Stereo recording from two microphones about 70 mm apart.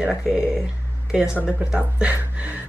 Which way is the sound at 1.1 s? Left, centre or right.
Centre.